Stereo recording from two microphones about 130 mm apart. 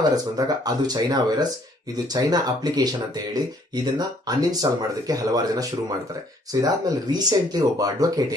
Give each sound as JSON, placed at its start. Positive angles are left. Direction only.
{"t": 0.0, "sound": "speech", "side_deg": -30}